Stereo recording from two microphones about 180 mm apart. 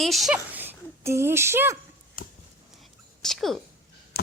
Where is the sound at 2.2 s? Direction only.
50° left (ahead or behind).